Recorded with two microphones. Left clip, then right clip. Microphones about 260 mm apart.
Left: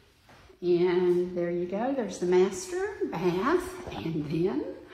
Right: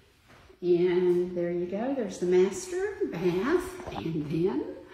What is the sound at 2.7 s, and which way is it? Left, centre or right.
A woman's voice, centre.